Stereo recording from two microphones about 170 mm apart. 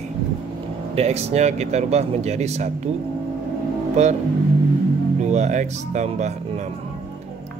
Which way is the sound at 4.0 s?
45° right (ahead or behind).